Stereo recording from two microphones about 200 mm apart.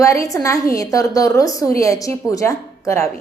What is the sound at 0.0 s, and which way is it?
A woman's voice, 15° left (ahead or behind).